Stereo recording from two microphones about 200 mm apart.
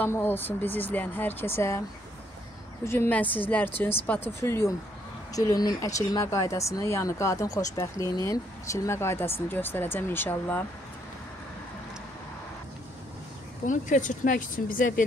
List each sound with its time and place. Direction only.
0.0 s speech: 10° left (ahead or behind)
2.8 s speech: 15° left (ahead or behind)
13.7 s speech: 40° left (ahead or behind)